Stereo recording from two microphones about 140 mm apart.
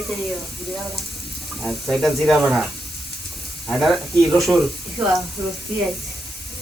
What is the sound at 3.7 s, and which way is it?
Stir, centre (ahead or behind).